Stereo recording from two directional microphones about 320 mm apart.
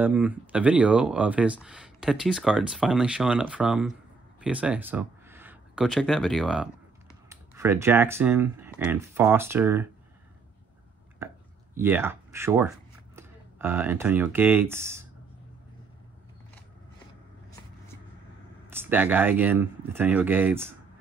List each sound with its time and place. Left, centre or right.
0.0 s speech: centre
11.7 s speech: centre
18.7 s speech: centre